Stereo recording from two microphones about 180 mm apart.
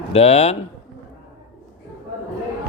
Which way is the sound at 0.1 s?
35° left (ahead or behind).